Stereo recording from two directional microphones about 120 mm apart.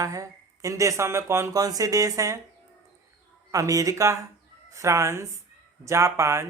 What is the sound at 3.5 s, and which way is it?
A woman's voice, 30° right (ahead or behind).